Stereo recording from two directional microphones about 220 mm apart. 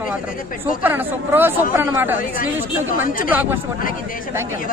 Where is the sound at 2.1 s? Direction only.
35° left (ahead or behind).